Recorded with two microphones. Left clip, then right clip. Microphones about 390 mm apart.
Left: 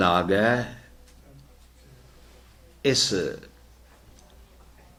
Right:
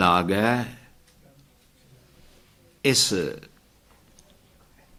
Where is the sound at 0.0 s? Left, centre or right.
Right.